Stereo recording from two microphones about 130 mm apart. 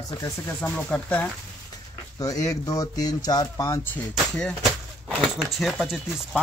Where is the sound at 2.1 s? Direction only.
25° left (ahead or behind).